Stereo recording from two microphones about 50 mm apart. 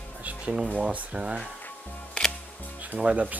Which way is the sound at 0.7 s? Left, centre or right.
Right.